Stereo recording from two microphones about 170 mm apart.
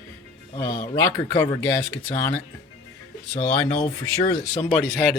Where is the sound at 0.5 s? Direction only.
20° left (ahead or behind).